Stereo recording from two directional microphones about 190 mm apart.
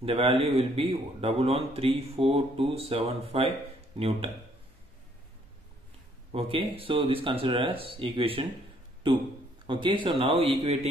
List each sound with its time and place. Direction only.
0.0 s a man's voice: 30° right (ahead or behind)
6.3 s a man's voice: 30° right (ahead or behind)
9.7 s a man's voice: 25° right (ahead or behind)